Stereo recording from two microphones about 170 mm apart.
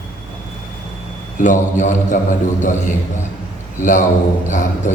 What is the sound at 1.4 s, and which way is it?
Speech, 45° left (ahead or behind).